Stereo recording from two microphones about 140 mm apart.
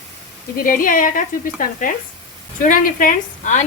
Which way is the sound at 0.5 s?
85° left.